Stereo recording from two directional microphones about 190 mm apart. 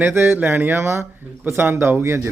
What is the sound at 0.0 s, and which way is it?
Speech, 10° right (ahead or behind).